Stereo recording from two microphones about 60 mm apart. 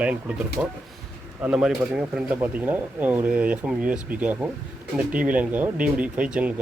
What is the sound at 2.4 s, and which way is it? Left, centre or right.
Speech, right.